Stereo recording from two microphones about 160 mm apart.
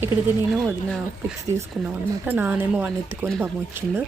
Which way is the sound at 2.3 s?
10° right (ahead or behind).